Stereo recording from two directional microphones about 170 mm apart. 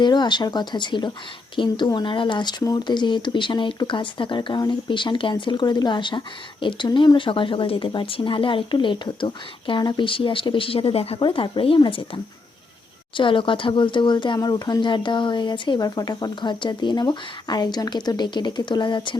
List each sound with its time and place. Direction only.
0.0 s speech: 25° left (ahead or behind)